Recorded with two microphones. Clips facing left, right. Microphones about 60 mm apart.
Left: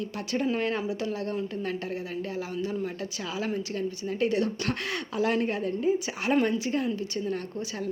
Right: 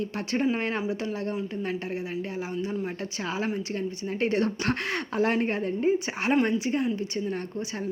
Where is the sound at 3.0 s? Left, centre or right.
Right.